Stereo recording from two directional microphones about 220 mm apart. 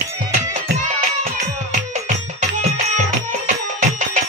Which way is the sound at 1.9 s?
30° right (ahead or behind).